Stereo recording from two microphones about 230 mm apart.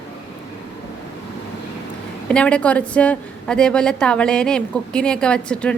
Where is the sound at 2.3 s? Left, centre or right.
Centre.